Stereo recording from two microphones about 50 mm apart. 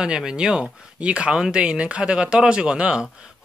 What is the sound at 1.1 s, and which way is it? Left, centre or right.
Speech, right.